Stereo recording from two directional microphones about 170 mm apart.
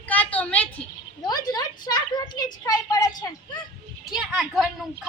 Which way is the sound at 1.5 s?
25° left (ahead or behind).